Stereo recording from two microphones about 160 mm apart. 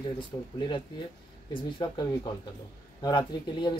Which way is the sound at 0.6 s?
30° left (ahead or behind).